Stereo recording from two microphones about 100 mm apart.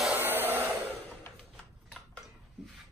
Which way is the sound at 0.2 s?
20° right (ahead or behind).